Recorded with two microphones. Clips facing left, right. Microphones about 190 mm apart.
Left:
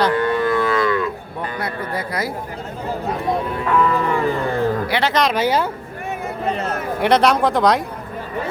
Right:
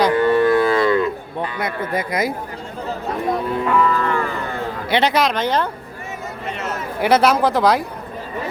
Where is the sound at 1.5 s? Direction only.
20° right (ahead or behind).